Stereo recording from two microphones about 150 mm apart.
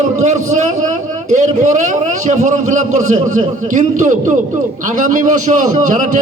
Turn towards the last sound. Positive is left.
turn(degrees=-55)  # may be behind; listen again after turning